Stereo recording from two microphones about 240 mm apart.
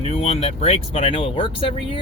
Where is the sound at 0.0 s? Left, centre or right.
Left.